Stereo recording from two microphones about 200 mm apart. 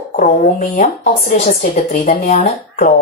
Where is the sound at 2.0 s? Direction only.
40° left (ahead or behind).